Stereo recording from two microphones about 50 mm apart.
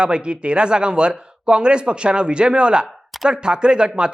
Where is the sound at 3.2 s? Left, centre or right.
Centre.